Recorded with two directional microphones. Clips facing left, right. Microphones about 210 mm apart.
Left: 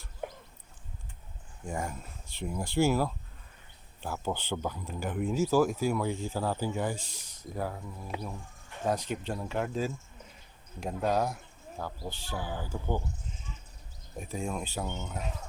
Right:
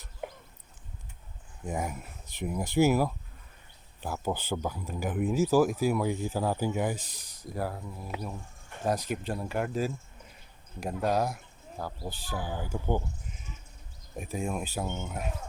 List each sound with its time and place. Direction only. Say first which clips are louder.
1.6 s speech: right 2 dB; 5° right (ahead or behind)
2.4 s speech: right 3 dB; 15° right (ahead or behind)
14.2 s speech: right 2 dB; 5° right (ahead or behind)